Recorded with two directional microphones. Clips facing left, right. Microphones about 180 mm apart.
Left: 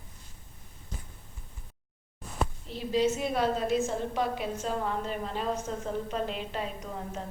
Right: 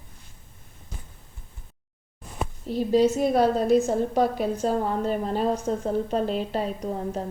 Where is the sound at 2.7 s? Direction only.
40° right (ahead or behind).